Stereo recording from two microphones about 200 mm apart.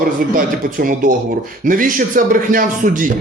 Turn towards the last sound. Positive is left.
turn(degrees=-40)  # may be behind; listen again after turning